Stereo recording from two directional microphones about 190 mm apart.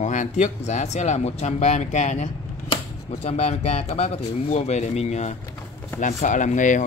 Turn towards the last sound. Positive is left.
turn(degrees=40)  # may be behind; listen again after turning